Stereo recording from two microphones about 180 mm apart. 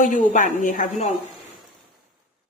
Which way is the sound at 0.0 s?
45° left (ahead or behind).